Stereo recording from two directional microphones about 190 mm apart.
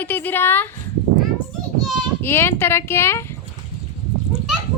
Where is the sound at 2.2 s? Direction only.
10° left (ahead or behind).